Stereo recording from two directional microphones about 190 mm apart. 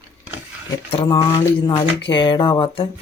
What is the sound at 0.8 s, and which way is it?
Speech, 30° left (ahead or behind).